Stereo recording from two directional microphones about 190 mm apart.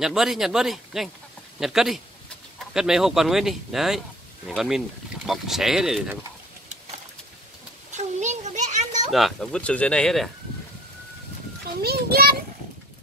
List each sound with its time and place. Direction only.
0.0 s speech: centre (ahead or behind)
7.9 s children playing: 40° right (ahead or behind)
9.1 s speech: centre (ahead or behind)
11.8 s a child's voice: 55° right (ahead or behind)